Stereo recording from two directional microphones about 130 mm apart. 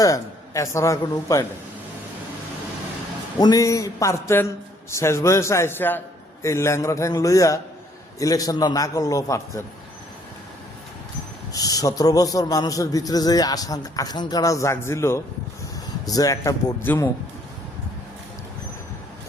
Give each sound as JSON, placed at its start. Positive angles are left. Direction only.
{"t": 0.0, "sound": "a man's voice", "side_deg": 25}
{"t": 3.3, "sound": "a man's voice", "side_deg": 30}
{"t": 11.5, "sound": "a man's voice", "side_deg": 30}